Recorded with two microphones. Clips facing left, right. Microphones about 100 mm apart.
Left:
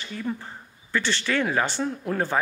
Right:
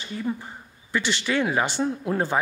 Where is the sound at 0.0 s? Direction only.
20° right (ahead or behind).